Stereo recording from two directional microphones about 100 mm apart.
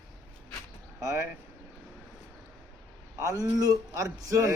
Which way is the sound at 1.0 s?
30° right (ahead or behind).